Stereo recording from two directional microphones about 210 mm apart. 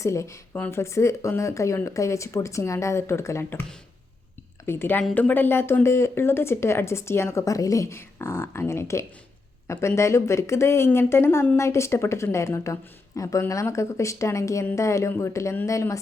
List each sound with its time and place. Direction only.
0.0 s speech: 15° left (ahead or behind)